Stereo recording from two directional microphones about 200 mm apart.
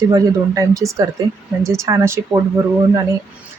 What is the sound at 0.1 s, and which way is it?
Speech, 15° right (ahead or behind).